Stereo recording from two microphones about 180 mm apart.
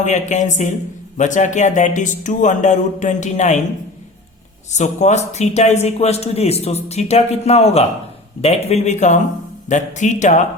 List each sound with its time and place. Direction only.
0.0 s a man's voice: 40° left (ahead or behind)
4.7 s a man's voice: 40° left (ahead or behind)